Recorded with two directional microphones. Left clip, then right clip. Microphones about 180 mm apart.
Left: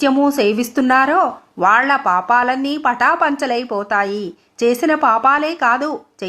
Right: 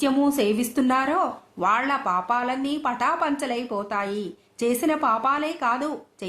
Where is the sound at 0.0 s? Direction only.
20° left (ahead or behind).